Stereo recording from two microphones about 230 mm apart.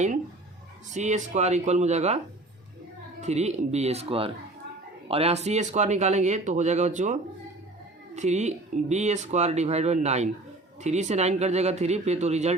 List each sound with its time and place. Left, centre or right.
0.9 s speech: right